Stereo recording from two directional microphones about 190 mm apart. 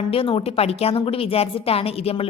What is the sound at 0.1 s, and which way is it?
A woman's voice, 30° left (ahead or behind).